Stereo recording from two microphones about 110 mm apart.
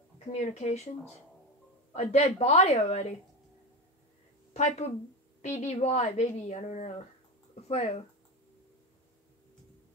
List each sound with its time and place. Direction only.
0.3 s speech: 80° left
2.0 s a woman's voice: 80° left
4.6 s a woman's voice: 85° left
7.6 s speech: 75° left (ahead or behind)